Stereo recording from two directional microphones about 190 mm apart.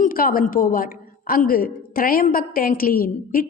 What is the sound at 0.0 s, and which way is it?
A woman's voice, 50° left (ahead or behind).